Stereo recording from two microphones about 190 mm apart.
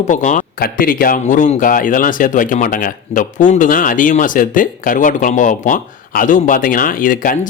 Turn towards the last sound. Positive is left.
turn(degrees=45)  # may be behind; listen again after turning